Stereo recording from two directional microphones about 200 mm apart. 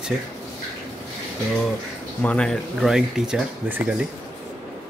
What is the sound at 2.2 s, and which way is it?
Speech, 5° left (ahead or behind).